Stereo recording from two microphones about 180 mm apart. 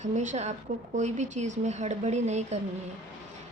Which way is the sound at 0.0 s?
40° right (ahead or behind).